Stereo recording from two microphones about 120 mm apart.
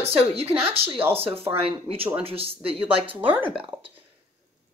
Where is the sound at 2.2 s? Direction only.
55° right (ahead or behind).